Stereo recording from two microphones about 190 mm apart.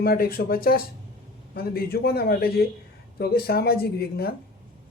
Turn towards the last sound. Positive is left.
turn(degrees=55)  # may be behind; listen again after turning